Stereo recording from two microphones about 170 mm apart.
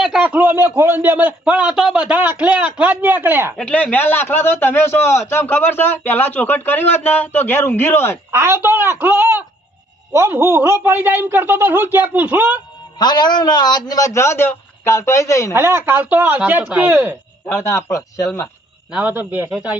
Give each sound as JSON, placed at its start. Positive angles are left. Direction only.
{"t": 0.0, "sound": "a man's voice", "side_deg": -5}
{"t": 3.6, "sound": "speech", "side_deg": 5}
{"t": 8.3, "sound": "a man's voice", "side_deg": -15}
{"t": 13.0, "sound": "a man's voice", "side_deg": 25}
{"t": 15.5, "sound": "a man's voice", "side_deg": -15}
{"t": 17.4, "sound": "speech", "side_deg": 15}
{"t": 18.9, "sound": "a man's voice", "side_deg": -10}